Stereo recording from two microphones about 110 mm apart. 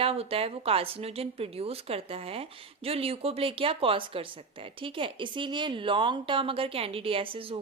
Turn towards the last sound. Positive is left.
turn(degrees=-55)  # may be behind; listen again after turning